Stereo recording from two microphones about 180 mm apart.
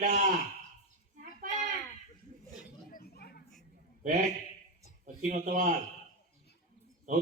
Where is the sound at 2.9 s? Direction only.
55° left (ahead or behind).